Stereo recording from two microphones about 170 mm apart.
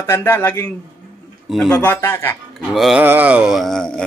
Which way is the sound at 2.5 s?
Centre (ahead or behind).